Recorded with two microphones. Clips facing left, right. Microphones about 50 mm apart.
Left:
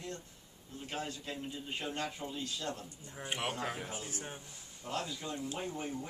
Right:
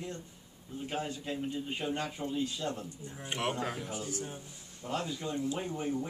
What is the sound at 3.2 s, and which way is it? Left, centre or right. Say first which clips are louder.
Speech: right 3 dB; centre.